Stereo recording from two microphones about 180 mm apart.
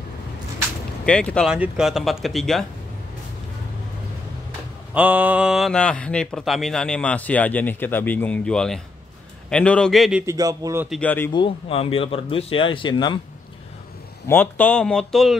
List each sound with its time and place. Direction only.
1.0 s speech: 5° left (ahead or behind)
4.9 s speech: 10° right (ahead or behind)
10.2 s a man's voice: 20° right (ahead or behind)
10.9 s speech: 10° left (ahead or behind)
11.3 s speech: 30° left (ahead or behind)
14.2 s speech: 10° left (ahead or behind)